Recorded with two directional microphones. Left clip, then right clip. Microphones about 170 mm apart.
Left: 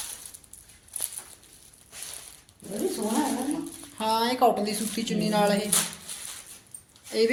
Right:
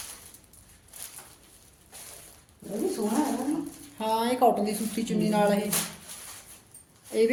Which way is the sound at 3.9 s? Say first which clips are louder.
Left 1 dB; 5° right (ahead or behind).